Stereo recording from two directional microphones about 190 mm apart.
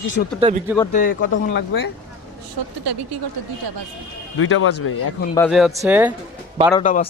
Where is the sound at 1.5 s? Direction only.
70° left (ahead or behind).